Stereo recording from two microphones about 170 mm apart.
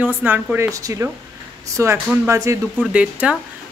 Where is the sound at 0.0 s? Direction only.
10° right (ahead or behind).